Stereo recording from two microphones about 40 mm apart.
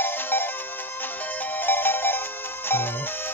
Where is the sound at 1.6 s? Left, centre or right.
Left.